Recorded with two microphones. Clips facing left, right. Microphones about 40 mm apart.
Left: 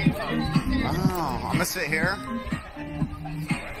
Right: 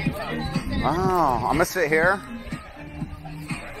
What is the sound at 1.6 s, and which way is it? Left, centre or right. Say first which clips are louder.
Speech: right 4 dB; right.